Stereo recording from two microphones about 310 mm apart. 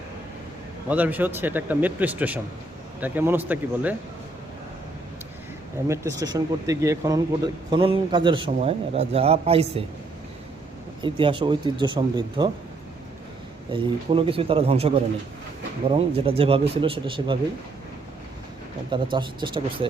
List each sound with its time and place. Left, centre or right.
0.9 s a man's voice: centre
5.9 s a man's voice: centre
11.0 s speech: centre
13.7 s speech: centre
19.1 s speech: centre